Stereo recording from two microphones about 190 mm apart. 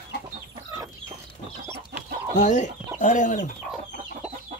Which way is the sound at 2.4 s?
40° left (ahead or behind).